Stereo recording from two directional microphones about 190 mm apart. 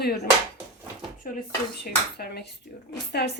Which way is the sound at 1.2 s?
45° left (ahead or behind).